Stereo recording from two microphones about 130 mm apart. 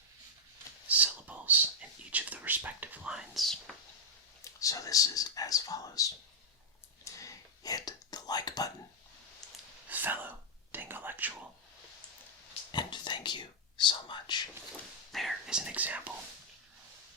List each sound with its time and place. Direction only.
0.9 s whispering: 10° right (ahead or behind)
4.4 s a sound: 25° left (ahead or behind)
7.0 s whispering: 25° left (ahead or behind)
9.9 s whispering: 15° right (ahead or behind)
12.7 s whispering: 35° left (ahead or behind)
15.1 s whispering: centre (ahead or behind)